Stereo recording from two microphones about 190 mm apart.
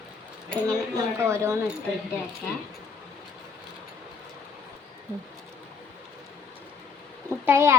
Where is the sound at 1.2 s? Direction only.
15° right (ahead or behind).